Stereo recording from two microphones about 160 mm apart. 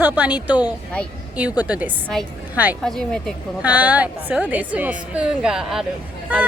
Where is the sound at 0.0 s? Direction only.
10° right (ahead or behind).